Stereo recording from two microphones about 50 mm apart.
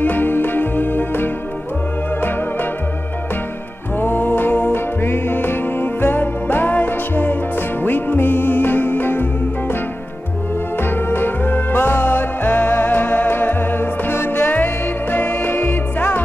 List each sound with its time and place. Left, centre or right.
0.0 s music: left
4.0 s music: left
10.8 s music: left